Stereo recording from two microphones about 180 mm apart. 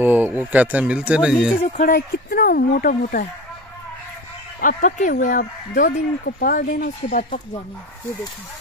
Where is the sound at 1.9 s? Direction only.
55° left (ahead or behind).